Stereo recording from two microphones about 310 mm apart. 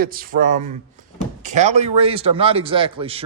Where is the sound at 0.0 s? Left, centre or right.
Right.